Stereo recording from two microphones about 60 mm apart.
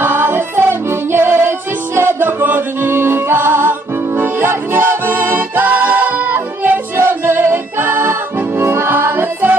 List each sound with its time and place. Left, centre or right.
0.0 s music: right